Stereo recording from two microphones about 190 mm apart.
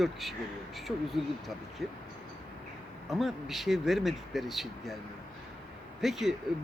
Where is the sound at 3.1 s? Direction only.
Centre (ahead or behind).